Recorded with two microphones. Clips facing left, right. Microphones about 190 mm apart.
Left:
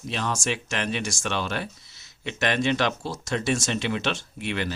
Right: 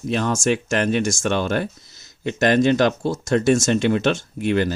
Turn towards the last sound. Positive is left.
turn(degrees=-45)  # may be behind; listen again after turning